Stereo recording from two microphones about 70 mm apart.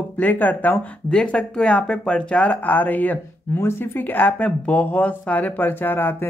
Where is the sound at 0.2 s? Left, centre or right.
Left.